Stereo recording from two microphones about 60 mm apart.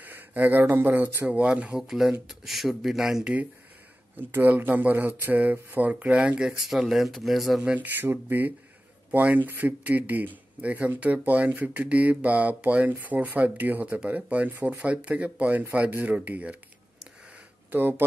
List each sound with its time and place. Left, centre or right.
0.0 s a man's voice: right
1.8 s speech: centre
4.2 s a man's voice: right; by 6.6 s centre
6.7 s speech: centre
7.6 s a man's voice: right
17.6 s speech: right